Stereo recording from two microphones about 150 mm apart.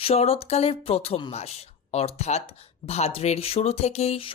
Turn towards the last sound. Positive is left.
turn(degrees=40)  # may be behind; listen again after turning